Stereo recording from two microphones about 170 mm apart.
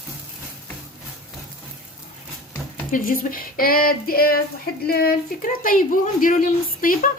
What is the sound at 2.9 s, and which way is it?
Speech, 55° left (ahead or behind).